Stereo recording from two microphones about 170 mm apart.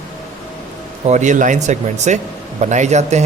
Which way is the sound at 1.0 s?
45° right (ahead or behind).